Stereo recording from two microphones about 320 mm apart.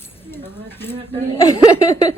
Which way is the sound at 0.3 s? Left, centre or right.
Centre.